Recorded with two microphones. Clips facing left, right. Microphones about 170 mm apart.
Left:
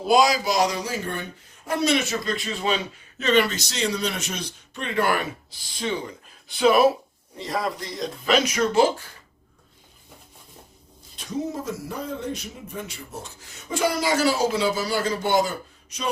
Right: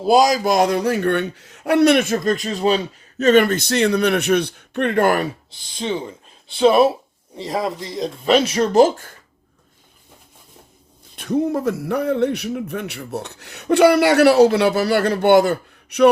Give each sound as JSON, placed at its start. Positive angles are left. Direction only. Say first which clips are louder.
{"t": 0.0, "sound": "speech", "louder": "right 4 dB", "side_deg": -40}
{"t": 6.5, "sound": "speech", "louder": "right 4 dB", "side_deg": -25}
{"t": 7.7, "sound": "a man's voice", "louder": "right 5 dB", "side_deg": 0}
{"t": 8.2, "sound": "speech", "louder": "right 5 dB", "side_deg": -30}
{"t": 11.2, "sound": "a man's voice", "louder": "right 9 dB", "side_deg": -60}